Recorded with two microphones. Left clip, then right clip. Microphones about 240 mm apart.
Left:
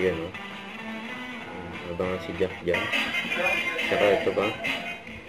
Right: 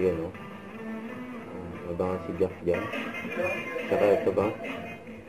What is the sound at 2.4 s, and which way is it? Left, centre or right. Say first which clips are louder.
Speech: left 2 dB; centre.